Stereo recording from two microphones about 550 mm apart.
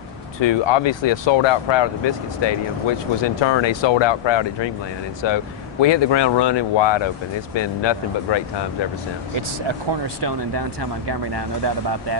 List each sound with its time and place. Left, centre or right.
0.4 s speech: left
10.2 s speech: right